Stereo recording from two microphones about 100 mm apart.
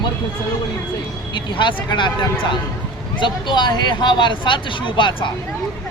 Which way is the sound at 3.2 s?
50° left (ahead or behind).